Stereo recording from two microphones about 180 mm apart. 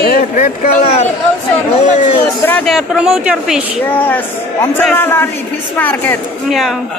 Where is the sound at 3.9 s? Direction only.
10° left (ahead or behind).